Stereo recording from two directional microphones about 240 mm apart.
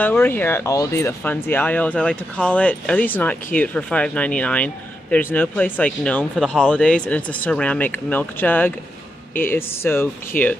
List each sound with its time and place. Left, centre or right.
0.0 s speech: centre